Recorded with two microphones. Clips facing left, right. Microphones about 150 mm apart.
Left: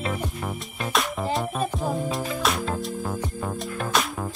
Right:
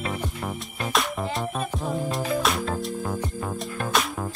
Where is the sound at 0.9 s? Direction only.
Centre (ahead or behind).